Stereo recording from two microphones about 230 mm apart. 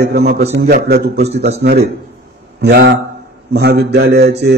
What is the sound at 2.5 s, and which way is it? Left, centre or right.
Speech, right.